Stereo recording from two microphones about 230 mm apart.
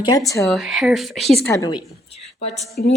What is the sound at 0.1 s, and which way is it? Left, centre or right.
Speech, centre.